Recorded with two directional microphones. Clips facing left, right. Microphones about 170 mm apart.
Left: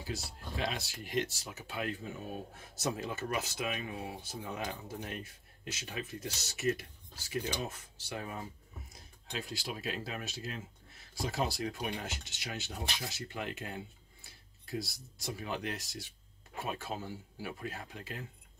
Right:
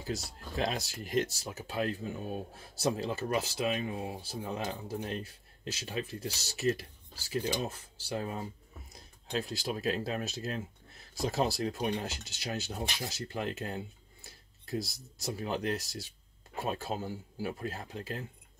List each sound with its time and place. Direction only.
0.0 s speech: 40° right (ahead or behind)